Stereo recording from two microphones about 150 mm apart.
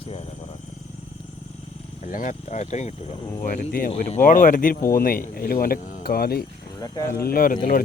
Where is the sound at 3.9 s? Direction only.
45° left (ahead or behind).